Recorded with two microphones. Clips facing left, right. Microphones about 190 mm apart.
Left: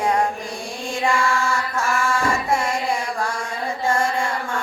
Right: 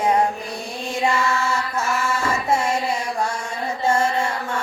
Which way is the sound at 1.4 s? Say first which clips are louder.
Even; 20° right (ahead or behind).